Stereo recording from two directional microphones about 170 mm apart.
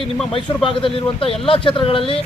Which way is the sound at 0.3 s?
30° left (ahead or behind).